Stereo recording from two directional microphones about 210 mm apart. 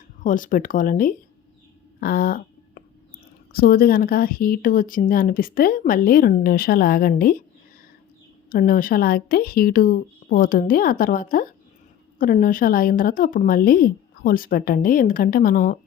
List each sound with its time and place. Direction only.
0.2 s speech: 40° left (ahead or behind)
2.0 s a sound: 45° left (ahead or behind)
3.5 s speech: 45° left (ahead or behind)
8.4 s speech: 45° left (ahead or behind)